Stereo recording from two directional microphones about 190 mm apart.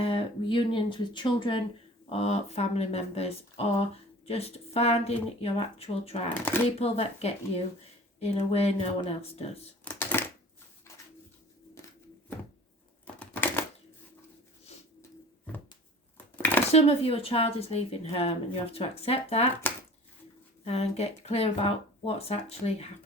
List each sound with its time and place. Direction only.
0.0 s a woman's voice: 30° left (ahead or behind)
9.8 s a sound: 10° left (ahead or behind)
13.1 s typewriter: 10° left (ahead or behind)
16.1 s a sound: 10° left (ahead or behind)
16.7 s a woman's voice: 30° left (ahead or behind)
20.7 s a woman's voice: 35° left (ahead or behind)